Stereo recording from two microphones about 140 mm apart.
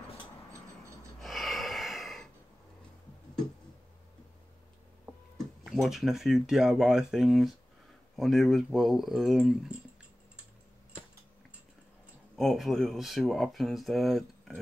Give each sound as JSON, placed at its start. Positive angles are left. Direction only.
{"t": 1.2, "sound": "gasp", "side_deg": 0}
{"t": 5.7, "sound": "speech", "side_deg": 0}
{"t": 12.4, "sound": "speech", "side_deg": 0}